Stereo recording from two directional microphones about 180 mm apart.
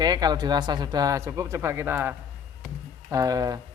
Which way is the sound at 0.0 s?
20° right (ahead or behind).